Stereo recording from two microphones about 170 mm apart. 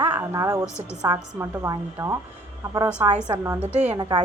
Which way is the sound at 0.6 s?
15° left (ahead or behind).